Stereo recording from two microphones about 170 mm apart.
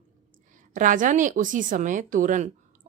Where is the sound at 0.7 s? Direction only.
50° right (ahead or behind).